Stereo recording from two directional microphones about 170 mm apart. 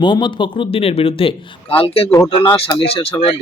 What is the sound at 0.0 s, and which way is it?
A man's voice, 30° left (ahead or behind).